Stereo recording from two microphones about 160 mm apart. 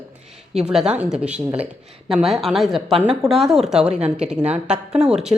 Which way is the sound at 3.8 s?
40° right (ahead or behind).